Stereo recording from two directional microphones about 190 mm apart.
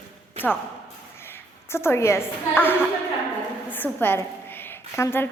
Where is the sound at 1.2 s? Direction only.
15° left (ahead or behind).